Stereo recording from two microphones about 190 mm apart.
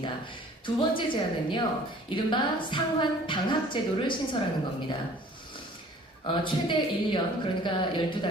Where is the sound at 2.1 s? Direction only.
25° left (ahead or behind).